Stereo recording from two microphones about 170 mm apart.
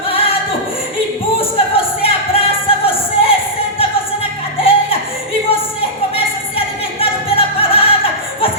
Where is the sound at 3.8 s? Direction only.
35° left (ahead or behind).